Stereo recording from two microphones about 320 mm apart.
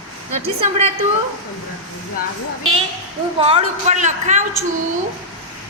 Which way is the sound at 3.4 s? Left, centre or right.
Centre.